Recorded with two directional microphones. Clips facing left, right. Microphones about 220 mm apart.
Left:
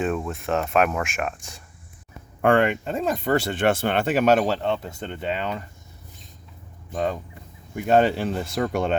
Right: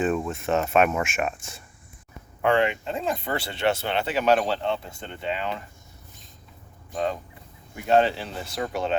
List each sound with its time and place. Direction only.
0.0 s speech: centre (ahead or behind)
2.4 s speech: 50° left (ahead or behind)
7.9 s speech: 50° left (ahead or behind)